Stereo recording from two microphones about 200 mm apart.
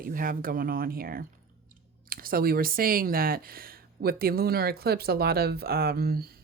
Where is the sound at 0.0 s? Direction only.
45° right (ahead or behind).